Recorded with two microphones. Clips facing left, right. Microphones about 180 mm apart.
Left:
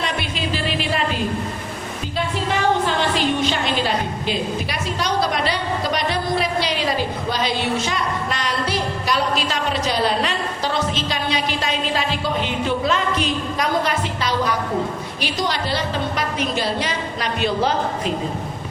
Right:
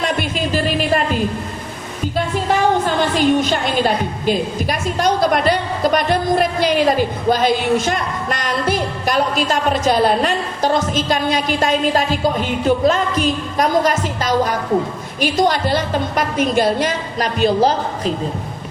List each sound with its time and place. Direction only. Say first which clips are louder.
0.0 s music: right 5 dB; 45° right (ahead or behind)
2.8 s a woman's voice: right 4 dB; 45° right (ahead or behind)